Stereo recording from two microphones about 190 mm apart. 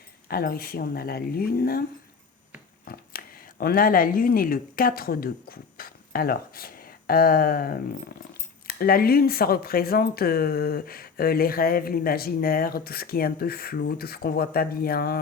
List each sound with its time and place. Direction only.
0.3 s speech: 50° left (ahead or behind)
2.8 s speech: 50° left (ahead or behind)